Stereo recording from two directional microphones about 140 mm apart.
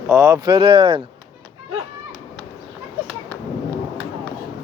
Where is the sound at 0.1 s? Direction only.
25° right (ahead or behind).